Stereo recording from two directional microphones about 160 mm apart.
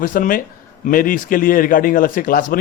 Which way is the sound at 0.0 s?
60° left (ahead or behind).